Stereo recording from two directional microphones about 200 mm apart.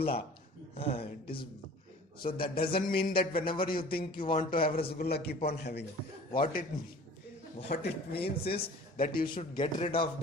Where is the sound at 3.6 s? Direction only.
45° left (ahead or behind).